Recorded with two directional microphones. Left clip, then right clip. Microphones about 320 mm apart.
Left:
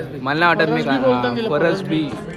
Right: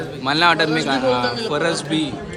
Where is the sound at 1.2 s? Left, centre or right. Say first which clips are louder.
Left 1 dB; left.